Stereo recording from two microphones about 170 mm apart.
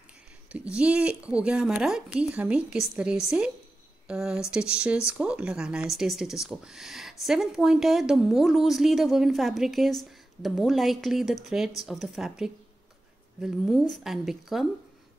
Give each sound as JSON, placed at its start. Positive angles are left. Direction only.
{"t": 0.5, "sound": "speech", "side_deg": -5}